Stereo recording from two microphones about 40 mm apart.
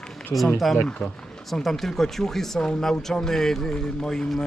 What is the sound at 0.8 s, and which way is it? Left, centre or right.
Speech, left.